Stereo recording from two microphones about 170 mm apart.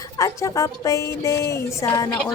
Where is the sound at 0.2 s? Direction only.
20° left (ahead or behind).